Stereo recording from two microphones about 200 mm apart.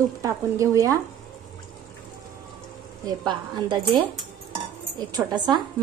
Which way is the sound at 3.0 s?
20° right (ahead or behind).